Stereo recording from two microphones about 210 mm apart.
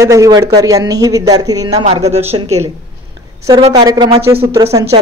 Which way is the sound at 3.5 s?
20° right (ahead or behind).